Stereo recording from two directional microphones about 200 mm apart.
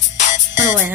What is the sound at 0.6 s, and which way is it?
Music, 10° right (ahead or behind).